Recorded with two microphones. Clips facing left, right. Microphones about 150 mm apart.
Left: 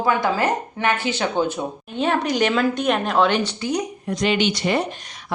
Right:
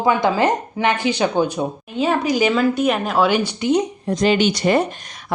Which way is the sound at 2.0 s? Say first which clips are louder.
Right 2 dB; 5° right (ahead or behind).